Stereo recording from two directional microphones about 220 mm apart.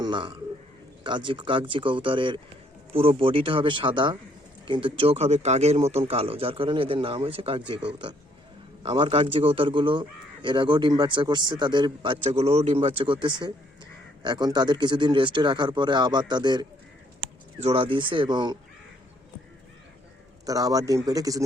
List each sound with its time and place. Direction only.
0.0 s a man's voice: 20° right (ahead or behind)
8.8 s a man's voice: 25° right (ahead or behind)
20.4 s a man's voice: 15° right (ahead or behind)